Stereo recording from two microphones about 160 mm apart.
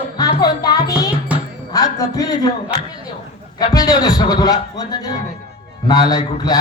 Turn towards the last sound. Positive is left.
turn(degrees=25)  # may be behind; listen again after turning